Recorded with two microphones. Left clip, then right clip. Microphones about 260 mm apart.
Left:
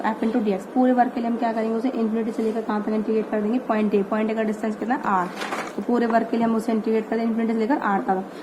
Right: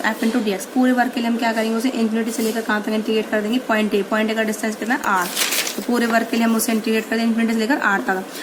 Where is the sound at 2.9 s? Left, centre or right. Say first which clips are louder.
Right 3 dB; right.